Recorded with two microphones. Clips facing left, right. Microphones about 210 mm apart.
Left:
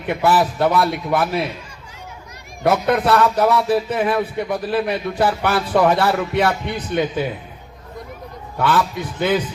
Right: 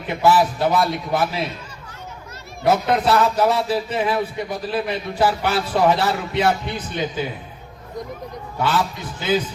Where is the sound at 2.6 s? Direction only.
55° left (ahead or behind).